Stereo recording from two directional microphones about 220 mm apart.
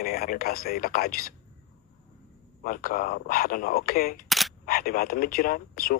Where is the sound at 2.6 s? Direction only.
40° left (ahead or behind).